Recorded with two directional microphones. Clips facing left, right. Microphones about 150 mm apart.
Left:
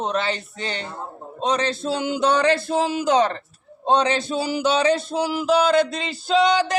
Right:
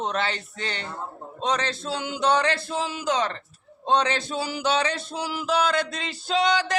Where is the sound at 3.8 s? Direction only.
40° left (ahead or behind).